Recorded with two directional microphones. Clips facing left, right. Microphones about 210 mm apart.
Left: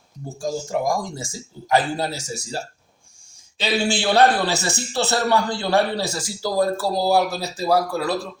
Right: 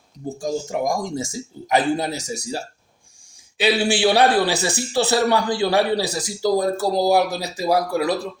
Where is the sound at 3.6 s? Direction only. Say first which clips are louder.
Right 4 dB; 15° right (ahead or behind).